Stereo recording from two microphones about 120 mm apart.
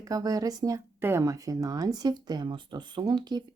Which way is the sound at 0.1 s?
30° right (ahead or behind).